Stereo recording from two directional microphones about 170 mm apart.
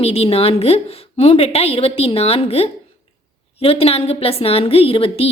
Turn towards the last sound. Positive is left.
turn(degrees=35)  # may be behind; listen again after turning